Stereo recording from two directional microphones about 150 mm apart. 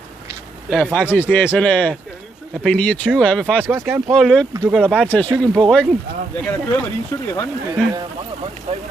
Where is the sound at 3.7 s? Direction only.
15° right (ahead or behind).